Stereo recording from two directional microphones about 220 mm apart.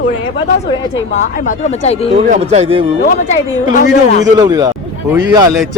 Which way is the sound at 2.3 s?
30° right (ahead or behind).